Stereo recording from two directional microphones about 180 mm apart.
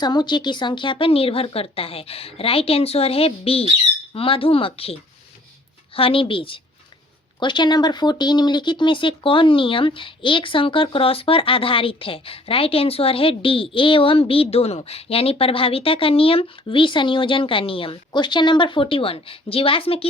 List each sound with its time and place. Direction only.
0.0 s speech: 25° left (ahead or behind)